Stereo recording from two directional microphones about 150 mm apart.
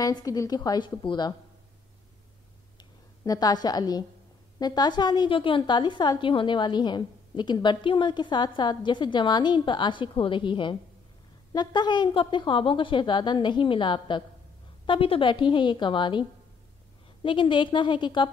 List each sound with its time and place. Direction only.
0.0 s a woman's voice: 25° left (ahead or behind)
2.8 s a woman's voice: 25° left (ahead or behind)